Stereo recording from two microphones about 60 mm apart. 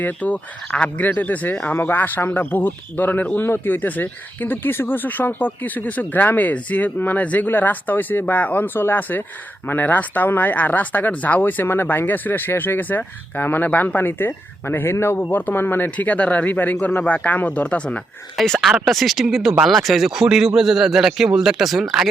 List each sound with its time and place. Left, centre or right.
0.0 s speech: left
15.3 s speech: left
18.3 s a man's voice: centre